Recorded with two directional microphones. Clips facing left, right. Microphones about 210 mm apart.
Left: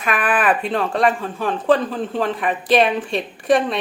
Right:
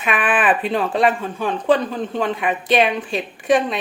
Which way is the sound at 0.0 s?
5° right (ahead or behind).